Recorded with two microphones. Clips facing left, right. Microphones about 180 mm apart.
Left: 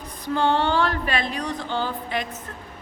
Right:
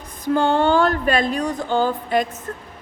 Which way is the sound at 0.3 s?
45° right (ahead or behind).